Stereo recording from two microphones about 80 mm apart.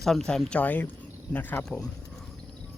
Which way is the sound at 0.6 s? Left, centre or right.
Left.